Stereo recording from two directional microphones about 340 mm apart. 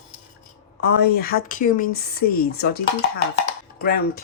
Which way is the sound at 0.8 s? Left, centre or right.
Left.